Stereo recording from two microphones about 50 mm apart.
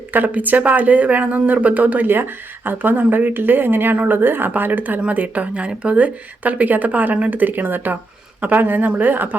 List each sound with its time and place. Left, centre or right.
0.1 s speech: right
2.1 s speech: right